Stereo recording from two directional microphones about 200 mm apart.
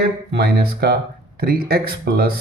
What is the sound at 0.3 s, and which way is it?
A man's voice, 55° right (ahead or behind).